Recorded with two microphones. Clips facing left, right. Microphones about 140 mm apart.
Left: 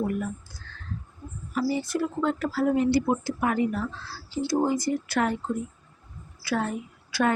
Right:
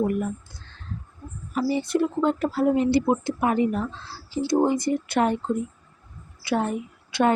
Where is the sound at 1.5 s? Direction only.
20° right (ahead or behind).